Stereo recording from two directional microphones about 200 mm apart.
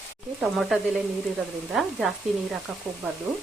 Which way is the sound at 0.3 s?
Centre (ahead or behind).